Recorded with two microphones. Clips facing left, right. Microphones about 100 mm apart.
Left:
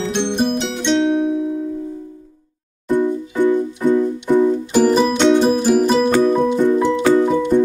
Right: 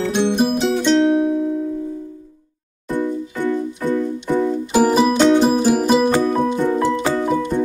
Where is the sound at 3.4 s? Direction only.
15° left (ahead or behind).